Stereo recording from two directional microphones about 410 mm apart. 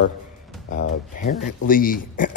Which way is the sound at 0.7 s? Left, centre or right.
Left.